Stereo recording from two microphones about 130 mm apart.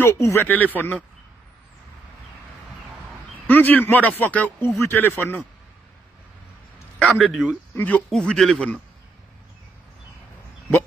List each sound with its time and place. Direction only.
0.0 s speech: 20° left (ahead or behind)
3.4 s speech: 15° left (ahead or behind)
7.2 s speech: centre (ahead or behind)
7.7 s speech: 10° left (ahead or behind)